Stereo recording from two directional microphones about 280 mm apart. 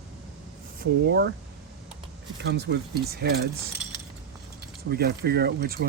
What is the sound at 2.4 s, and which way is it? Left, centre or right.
Speech, right.